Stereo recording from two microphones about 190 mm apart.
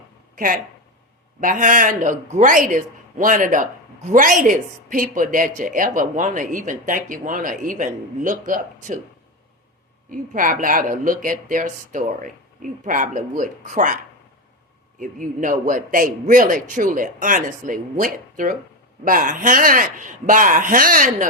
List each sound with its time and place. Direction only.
0.3 s speech: 45° right (ahead or behind)
10.1 s speech: 45° right (ahead or behind)